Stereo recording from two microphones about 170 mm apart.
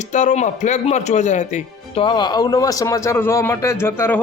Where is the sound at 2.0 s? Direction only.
25° left (ahead or behind).